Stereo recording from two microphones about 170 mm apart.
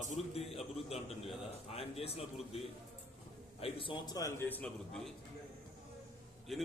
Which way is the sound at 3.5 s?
35° left (ahead or behind).